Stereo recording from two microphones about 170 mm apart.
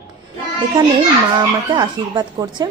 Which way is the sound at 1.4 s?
25° right (ahead or behind).